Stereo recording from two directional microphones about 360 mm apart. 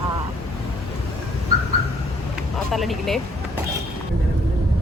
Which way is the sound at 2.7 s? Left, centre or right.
Centre.